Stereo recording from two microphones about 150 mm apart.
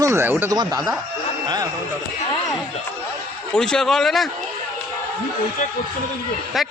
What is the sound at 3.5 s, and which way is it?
Speech, 5° left (ahead or behind).